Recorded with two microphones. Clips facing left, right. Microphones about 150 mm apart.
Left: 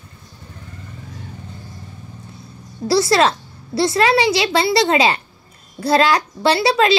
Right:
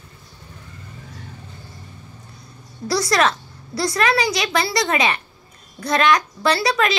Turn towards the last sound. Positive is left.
turn(degrees=25)  # may be behind; listen again after turning